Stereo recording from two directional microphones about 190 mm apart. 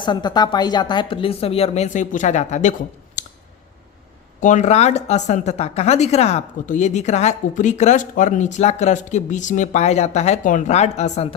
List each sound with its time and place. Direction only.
0.0 s speech: 25° left (ahead or behind); by 2.7 s 40° left (ahead or behind)
3.2 s clicking: 40° left (ahead or behind)
4.4 s a woman's voice: 40° left (ahead or behind)